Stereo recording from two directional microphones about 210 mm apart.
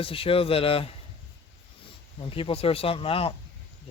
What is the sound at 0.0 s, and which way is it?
Speech, 25° left (ahead or behind).